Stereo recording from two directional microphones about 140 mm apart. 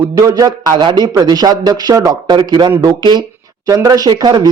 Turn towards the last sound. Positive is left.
turn(degrees=-30)  # may be behind; listen again after turning